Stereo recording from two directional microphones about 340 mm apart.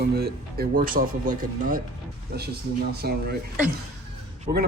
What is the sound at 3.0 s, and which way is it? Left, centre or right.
Speech, right.